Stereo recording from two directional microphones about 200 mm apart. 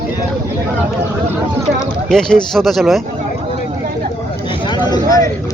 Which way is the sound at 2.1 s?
5° left (ahead or behind).